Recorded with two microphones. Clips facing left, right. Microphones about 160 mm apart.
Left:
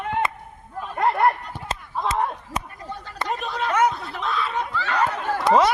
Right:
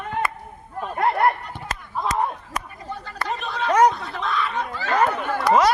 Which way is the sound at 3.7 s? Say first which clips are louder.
Right 4 dB; 35° right (ahead or behind).